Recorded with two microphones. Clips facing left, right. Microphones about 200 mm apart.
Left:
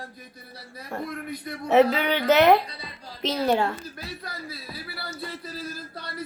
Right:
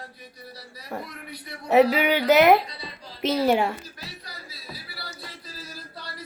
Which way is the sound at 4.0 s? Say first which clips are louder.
Left 5 dB; 55° left (ahead or behind).